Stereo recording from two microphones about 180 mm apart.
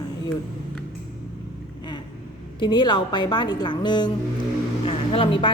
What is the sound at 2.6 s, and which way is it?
A woman's voice, 25° left (ahead or behind).